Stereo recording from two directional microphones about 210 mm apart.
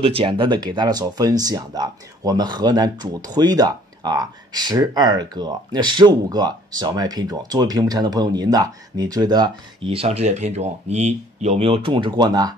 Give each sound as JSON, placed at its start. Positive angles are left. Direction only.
{"t": 0.0, "sound": "speech", "side_deg": -25}